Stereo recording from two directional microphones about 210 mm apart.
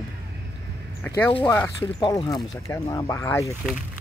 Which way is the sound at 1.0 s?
10° left (ahead or behind).